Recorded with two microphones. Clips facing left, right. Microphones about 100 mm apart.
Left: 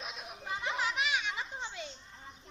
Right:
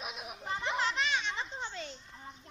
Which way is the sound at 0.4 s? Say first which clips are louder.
Right 2 dB; 5° left (ahead or behind).